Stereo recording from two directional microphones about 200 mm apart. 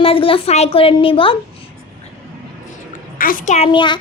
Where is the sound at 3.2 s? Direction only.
45° left (ahead or behind).